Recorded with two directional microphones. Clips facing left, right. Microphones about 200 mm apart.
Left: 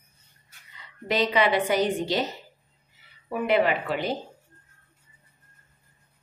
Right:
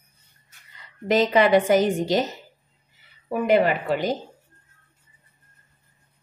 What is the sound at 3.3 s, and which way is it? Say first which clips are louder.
Speech: right 3 dB; 40° right (ahead or behind).